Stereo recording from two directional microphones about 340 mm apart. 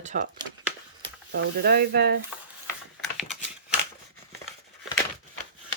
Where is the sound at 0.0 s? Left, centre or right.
Right.